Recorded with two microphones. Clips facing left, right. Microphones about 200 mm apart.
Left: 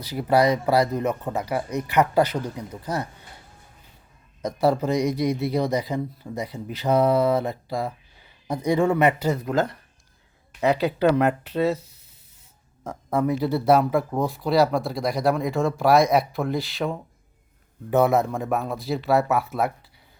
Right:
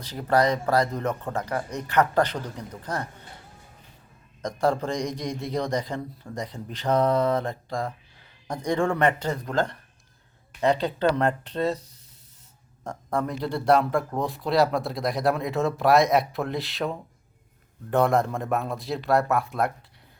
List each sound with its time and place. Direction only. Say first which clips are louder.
0.0 s speech: left 3 dB; 10° left (ahead or behind)
4.4 s speech: left 3 dB; 5° left (ahead or behind)